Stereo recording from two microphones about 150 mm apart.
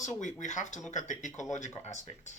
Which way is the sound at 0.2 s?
55° left (ahead or behind).